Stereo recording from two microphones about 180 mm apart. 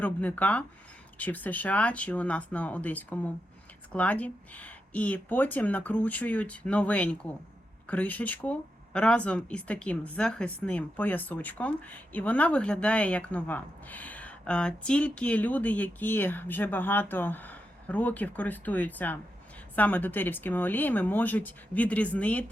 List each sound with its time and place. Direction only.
0.0 s speech: 10° left (ahead or behind)